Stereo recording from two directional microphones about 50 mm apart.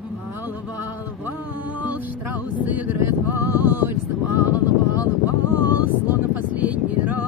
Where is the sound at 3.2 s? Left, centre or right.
Right.